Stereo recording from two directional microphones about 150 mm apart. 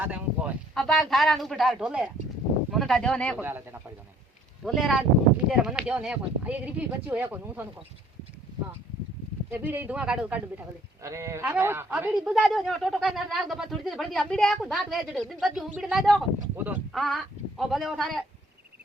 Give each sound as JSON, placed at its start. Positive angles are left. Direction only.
{"t": 0.0, "sound": "a sound", "side_deg": -10}
{"t": 0.7, "sound": "speech", "side_deg": 0}
{"t": 3.3, "sound": "speech", "side_deg": -15}
{"t": 4.6, "sound": "speech", "side_deg": 0}
{"t": 9.5, "sound": "speech", "side_deg": -15}
{"t": 11.0, "sound": "speech", "side_deg": -20}